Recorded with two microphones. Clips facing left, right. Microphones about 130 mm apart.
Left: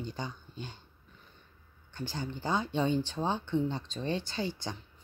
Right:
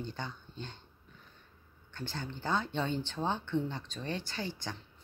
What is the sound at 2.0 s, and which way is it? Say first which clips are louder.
Speech: left 3 dB; 15° left (ahead or behind).